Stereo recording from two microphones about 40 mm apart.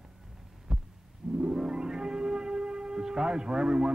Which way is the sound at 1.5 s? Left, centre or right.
Centre.